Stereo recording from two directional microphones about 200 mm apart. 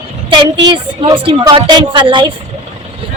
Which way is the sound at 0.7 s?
25° right (ahead or behind).